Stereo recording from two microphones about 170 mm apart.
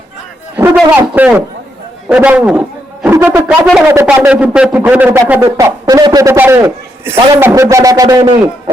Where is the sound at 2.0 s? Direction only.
5° right (ahead or behind).